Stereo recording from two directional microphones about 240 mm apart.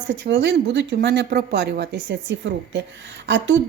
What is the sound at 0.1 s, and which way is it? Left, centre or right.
A woman's voice, right.